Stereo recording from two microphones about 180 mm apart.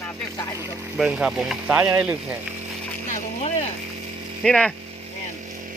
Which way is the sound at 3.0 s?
40° left (ahead or behind).